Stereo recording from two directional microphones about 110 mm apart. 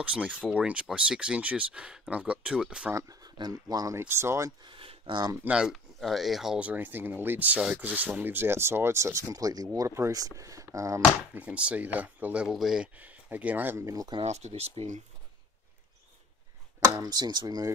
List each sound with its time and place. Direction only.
0.0 s speech: 10° right (ahead or behind)
2.9 s speech: 30° right (ahead or behind)
4.0 s speech: 25° right (ahead or behind)
4.6 s a sound: 55° right (ahead or behind)
5.5 s speech: 5° right (ahead or behind); by 11.0 s 30° right (ahead or behind)
11.3 s speech: 10° right (ahead or behind); by 14.1 s 30° right (ahead or behind)
14.2 s speech: 90° right; by 15.0 s 70° right (ahead or behind)
17.0 s speech: 35° right (ahead or behind)